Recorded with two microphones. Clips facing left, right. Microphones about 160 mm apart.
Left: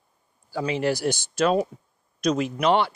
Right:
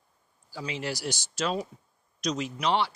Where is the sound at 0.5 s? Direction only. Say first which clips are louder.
Left 9 dB; 55° left (ahead or behind).